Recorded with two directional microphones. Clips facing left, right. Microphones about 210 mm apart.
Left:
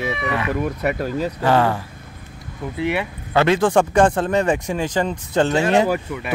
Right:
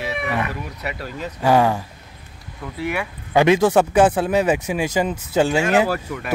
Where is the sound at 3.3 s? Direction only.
15° right (ahead or behind).